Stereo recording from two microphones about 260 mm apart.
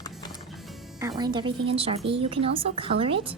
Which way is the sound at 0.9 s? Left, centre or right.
Centre.